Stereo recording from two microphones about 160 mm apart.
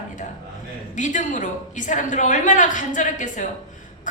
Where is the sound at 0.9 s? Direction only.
50° left (ahead or behind).